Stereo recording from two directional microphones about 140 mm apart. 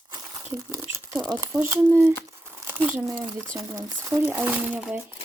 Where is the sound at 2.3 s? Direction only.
15° right (ahead or behind).